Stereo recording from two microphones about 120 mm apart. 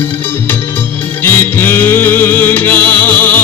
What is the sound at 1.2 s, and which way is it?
Music, 20° left (ahead or behind).